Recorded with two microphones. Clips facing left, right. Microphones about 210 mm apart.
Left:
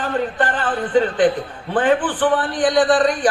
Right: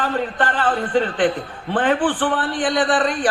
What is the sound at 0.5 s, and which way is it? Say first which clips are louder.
A man's voice: left 1 dB; 45° left (ahead or behind).